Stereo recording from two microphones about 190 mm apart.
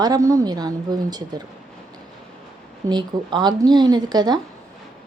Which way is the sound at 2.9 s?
25° right (ahead or behind).